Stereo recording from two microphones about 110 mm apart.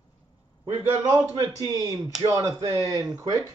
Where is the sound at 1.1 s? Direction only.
35° right (ahead or behind).